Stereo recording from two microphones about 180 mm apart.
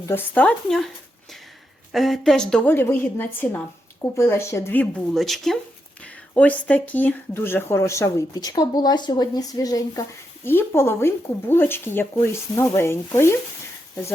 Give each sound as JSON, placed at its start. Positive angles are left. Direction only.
{"t": 0.0, "sound": "speech", "side_deg": 10}
{"t": 1.9, "sound": "speech", "side_deg": 0}